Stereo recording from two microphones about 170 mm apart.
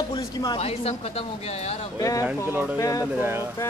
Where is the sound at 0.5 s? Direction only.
35° left (ahead or behind).